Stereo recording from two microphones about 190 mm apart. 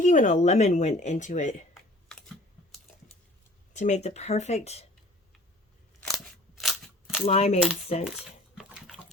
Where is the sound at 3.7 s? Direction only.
35° left (ahead or behind).